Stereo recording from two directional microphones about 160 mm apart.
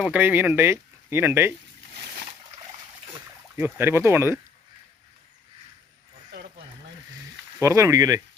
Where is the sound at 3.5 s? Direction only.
15° right (ahead or behind).